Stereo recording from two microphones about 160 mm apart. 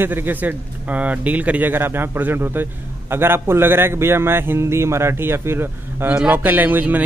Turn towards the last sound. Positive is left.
turn(degrees=-10)  # may be behind; listen again after turning